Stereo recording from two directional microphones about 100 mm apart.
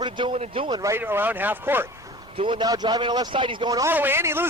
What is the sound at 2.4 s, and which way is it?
Speech, 55° right (ahead or behind).